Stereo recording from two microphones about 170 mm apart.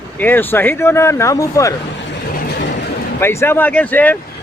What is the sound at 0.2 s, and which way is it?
Speech, 10° left (ahead or behind).